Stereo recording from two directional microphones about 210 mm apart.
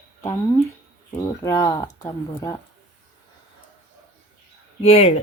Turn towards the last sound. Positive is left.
turn(degrees=30)  # may be behind; listen again after turning